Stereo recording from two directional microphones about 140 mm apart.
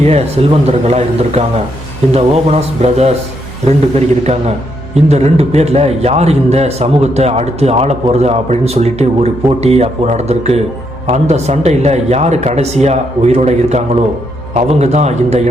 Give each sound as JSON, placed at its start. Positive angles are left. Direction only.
{"t": 0.4, "sound": "a man's voice", "side_deg": -45}